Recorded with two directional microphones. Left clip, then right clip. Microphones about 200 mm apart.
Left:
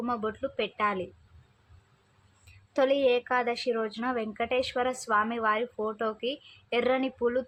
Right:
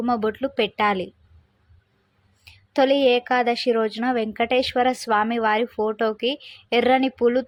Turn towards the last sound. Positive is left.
turn(degrees=-25)  # may be behind; listen again after turning